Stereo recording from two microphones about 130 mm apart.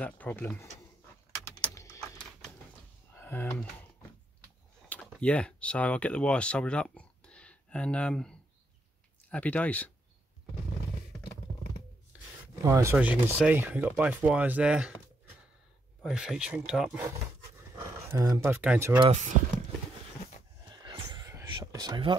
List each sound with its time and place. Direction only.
0.0 s speech: 10° left (ahead or behind)
1.4 s typing: 20° left (ahead or behind)
3.2 s speech: 15° left (ahead or behind)
4.8 s computer keyboard: 10° left (ahead or behind)
5.2 s speech: 10° left (ahead or behind)
12.6 s speech: 25° right (ahead or behind)
12.9 s speech: 10° right (ahead or behind)
16.0 s speech: 5° right (ahead or behind)
18.1 s speech: 25° right (ahead or behind)
18.4 s speech: 10° right (ahead or behind)
20.7 s a sound: 35° right (ahead or behind)
21.5 s whispering: 35° right (ahead or behind)